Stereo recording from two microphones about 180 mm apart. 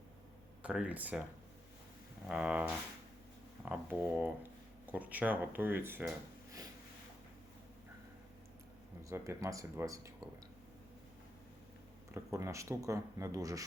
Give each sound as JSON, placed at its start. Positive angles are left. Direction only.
{"t": 0.6, "sound": "speech", "side_deg": -5}
{"t": 2.3, "sound": "speech", "side_deg": -5}
{"t": 9.0, "sound": "speech", "side_deg": -15}
{"t": 12.1, "sound": "speech", "side_deg": -15}